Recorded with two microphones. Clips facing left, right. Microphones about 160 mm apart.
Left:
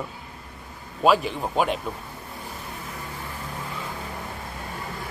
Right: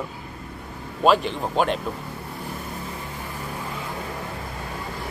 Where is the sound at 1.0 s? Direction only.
Centre (ahead or behind).